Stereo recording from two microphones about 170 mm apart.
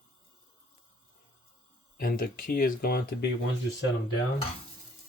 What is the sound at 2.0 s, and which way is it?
Speech, 60° left (ahead or behind).